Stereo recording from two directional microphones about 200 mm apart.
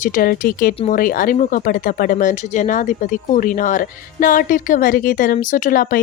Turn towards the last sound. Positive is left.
turn(degrees=45)  # may be behind; listen again after turning